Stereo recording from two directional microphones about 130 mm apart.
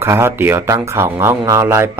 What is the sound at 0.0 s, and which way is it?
Speech, 20° right (ahead or behind).